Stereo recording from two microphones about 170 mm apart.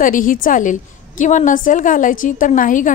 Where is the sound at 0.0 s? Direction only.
55° left (ahead or behind).